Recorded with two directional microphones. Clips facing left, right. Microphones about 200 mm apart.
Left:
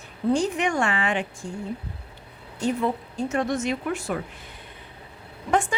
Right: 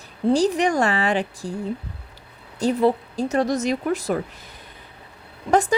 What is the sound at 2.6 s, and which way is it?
A woman's voice, 35° right (ahead or behind).